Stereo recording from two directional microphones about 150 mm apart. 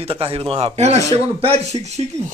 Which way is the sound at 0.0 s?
40° right (ahead or behind).